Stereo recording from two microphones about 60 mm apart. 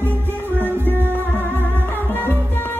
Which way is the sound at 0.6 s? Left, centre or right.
Right.